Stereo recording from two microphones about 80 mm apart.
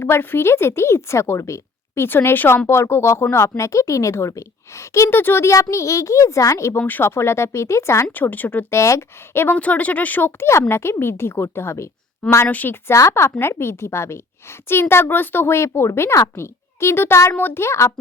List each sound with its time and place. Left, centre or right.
0.0 s speech: left
2.0 s speech: left
6.7 s speech: left
8.1 s speech: left
8.7 s speech: left
9.6 s speech: centre; by 11.9 s left
12.5 s speech: left
12.9 s speech: left